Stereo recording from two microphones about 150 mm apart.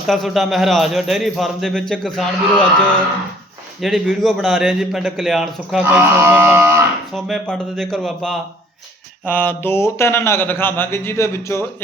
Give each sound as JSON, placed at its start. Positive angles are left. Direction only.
{"t": 0.1, "sound": "speech", "side_deg": 0}
{"t": 5.8, "sound": "speech", "side_deg": -15}
{"t": 7.1, "sound": "speech", "side_deg": 0}
{"t": 9.2, "sound": "speech", "side_deg": 10}